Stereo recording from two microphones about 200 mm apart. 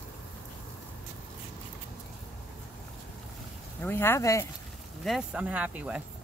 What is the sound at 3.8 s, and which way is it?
Speech, 10° left (ahead or behind).